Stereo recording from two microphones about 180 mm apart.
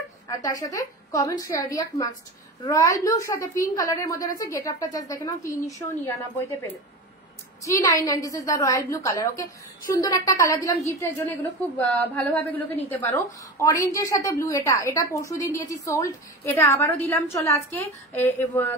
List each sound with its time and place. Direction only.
0.3 s a woman's voice: 20° left (ahead or behind)
7.6 s a woman's voice: 15° left (ahead or behind)